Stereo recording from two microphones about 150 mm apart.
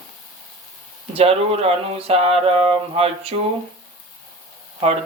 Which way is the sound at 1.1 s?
40° right (ahead or behind).